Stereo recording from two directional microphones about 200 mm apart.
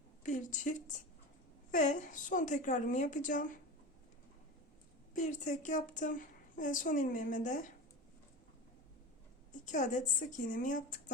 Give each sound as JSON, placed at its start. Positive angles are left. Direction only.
{"t": 0.2, "sound": "a woman's voice", "side_deg": 40}
{"t": 5.1, "sound": "a woman's voice", "side_deg": 40}
{"t": 9.6, "sound": "a woman's voice", "side_deg": 40}